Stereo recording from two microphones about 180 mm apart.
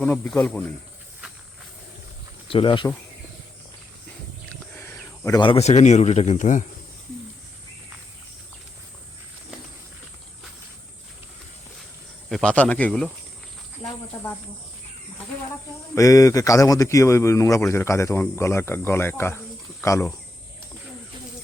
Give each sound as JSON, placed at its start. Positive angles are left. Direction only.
{"t": 0.0, "sound": "speech", "side_deg": 5}
{"t": 2.5, "sound": "speech", "side_deg": 30}
{"t": 4.7, "sound": "a sound", "side_deg": 10}
{"t": 5.4, "sound": "speech", "side_deg": 30}
{"t": 12.3, "sound": "speech", "side_deg": 5}
{"t": 16.0, "sound": "speech", "side_deg": 20}